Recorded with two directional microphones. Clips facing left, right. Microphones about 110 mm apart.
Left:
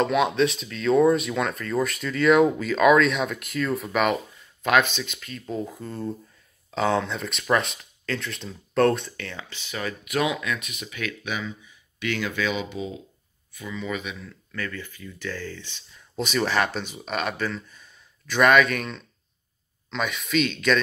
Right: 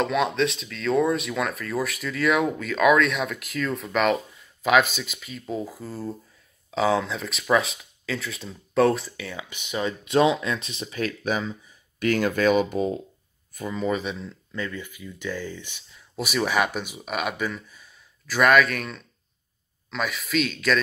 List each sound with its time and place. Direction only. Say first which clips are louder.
0.0 s speech: left 2 dB; centre (ahead or behind); by 14.1 s 35° right (ahead or behind)
14.2 s speech: right 2 dB; 20° right (ahead or behind); by 20.8 s centre (ahead or behind)